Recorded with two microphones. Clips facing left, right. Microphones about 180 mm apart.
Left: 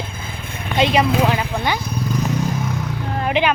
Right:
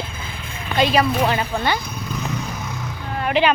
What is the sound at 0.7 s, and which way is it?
Speech, 20° left (ahead or behind).